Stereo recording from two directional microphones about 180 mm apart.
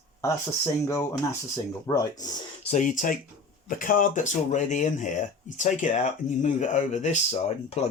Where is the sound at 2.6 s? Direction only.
40° left (ahead or behind).